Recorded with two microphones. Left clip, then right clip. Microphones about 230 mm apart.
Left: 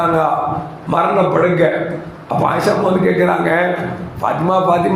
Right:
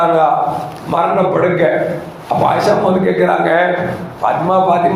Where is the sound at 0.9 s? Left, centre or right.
Left.